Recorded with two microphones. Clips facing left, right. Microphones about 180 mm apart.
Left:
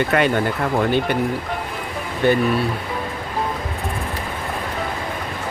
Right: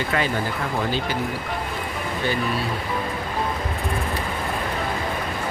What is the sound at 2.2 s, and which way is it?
Speech, 60° left (ahead or behind).